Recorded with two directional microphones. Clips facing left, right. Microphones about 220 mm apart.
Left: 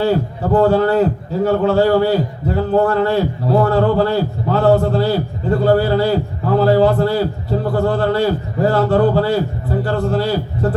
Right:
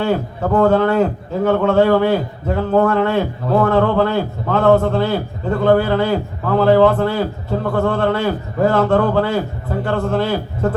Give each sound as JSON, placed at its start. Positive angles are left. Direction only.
{"t": 0.0, "sound": "a man's voice", "side_deg": 35}